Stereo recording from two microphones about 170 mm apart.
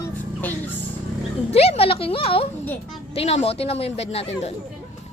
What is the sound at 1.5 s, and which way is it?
Speech, 35° left (ahead or behind).